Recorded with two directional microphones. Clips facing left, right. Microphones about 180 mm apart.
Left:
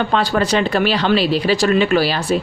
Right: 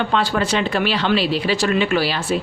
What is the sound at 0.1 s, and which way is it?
Speech, 40° left (ahead or behind).